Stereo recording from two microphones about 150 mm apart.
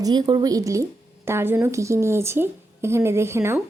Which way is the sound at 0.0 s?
30° right (ahead or behind).